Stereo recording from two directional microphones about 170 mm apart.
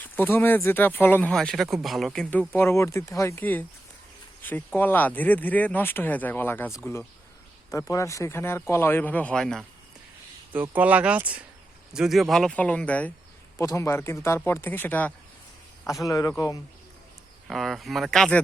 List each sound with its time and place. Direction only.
0.0 s speech: 10° left (ahead or behind)
10.5 s speech: 10° right (ahead or behind); by 16.3 s 20° left (ahead or behind)
17.5 s speech: centre (ahead or behind)